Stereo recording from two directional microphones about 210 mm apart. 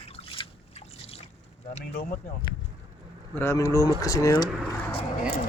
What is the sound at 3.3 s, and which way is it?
Speech, 10° left (ahead or behind).